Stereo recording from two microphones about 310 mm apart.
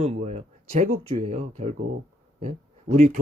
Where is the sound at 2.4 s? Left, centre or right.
Right.